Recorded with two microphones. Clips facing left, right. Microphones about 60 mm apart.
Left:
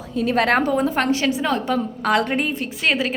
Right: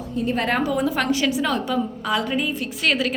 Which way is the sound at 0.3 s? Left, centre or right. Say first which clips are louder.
Left 5 dB; left.